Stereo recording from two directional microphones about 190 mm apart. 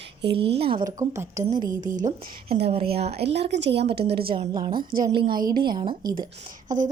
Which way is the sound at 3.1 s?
65° right (ahead or behind).